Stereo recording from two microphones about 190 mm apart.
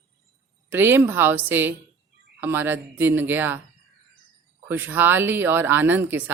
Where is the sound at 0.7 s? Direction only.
10° right (ahead or behind).